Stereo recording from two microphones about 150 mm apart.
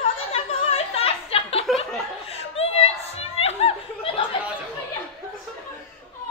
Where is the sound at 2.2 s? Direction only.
40° left (ahead or behind).